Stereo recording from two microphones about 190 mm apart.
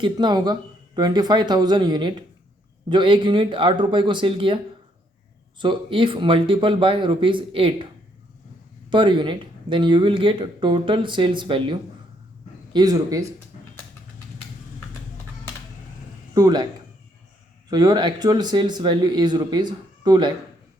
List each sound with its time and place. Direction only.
0.0 s speech: 25° right (ahead or behind)
8.9 s speech: 25° right (ahead or behind)
16.3 s speech: 20° right (ahead or behind)
17.7 s speech: 20° right (ahead or behind)